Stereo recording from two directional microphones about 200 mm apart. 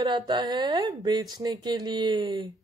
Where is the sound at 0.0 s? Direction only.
20° right (ahead or behind).